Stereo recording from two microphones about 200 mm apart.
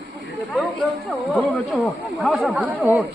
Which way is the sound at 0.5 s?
Centre (ahead or behind).